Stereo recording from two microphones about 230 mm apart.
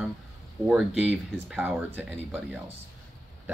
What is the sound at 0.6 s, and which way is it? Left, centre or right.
Speech, centre.